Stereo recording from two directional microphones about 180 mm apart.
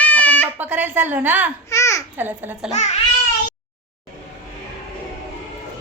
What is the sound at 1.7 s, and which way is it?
Babbling, 15° left (ahead or behind).